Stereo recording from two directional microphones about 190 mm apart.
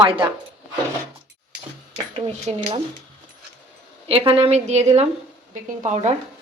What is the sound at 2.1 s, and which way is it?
Speech, 30° right (ahead or behind).